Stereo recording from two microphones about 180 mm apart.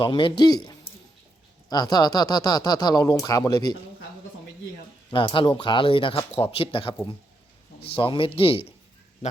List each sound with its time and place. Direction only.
0.0 s speech: 25° left (ahead or behind)
5.1 s speech: 25° left (ahead or behind)